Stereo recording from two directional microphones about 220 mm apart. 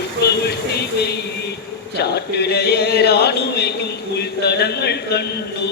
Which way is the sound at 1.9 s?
50° left (ahead or behind).